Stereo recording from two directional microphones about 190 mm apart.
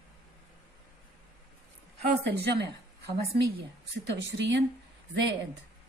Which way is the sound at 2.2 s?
60° right (ahead or behind).